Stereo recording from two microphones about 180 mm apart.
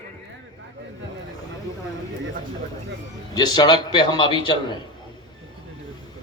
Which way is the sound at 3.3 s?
25° left (ahead or behind).